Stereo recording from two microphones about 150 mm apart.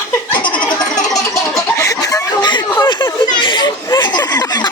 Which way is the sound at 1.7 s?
20° left (ahead or behind).